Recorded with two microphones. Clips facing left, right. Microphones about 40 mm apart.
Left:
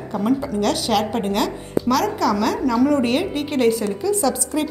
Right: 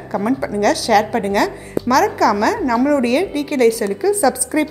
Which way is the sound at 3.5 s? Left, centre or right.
Right.